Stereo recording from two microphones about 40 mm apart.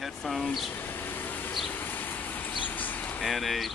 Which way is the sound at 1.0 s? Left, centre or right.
Left.